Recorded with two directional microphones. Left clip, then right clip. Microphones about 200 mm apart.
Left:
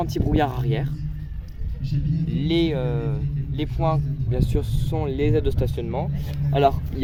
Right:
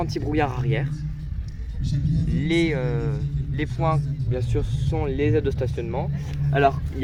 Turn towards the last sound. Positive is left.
turn(degrees=15)  # may be behind; listen again after turning